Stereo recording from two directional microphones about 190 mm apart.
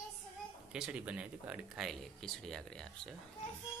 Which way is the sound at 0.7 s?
5° right (ahead or behind).